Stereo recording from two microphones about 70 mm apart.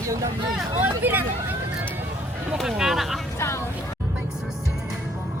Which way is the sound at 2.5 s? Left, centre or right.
Centre.